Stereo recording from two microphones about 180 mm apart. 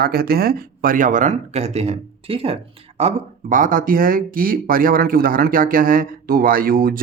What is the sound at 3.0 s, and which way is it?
Speech, 40° right (ahead or behind).